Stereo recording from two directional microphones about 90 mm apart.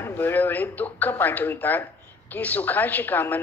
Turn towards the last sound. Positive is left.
turn(degrees=20)  # may be behind; listen again after turning